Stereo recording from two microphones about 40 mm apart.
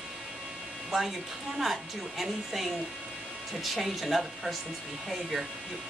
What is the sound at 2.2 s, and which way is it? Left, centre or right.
Speech, centre.